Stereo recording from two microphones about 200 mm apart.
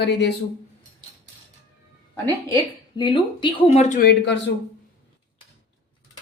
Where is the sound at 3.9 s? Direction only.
55° left (ahead or behind).